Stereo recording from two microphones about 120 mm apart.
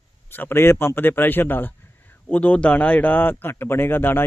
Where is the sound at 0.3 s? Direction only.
15° left (ahead or behind).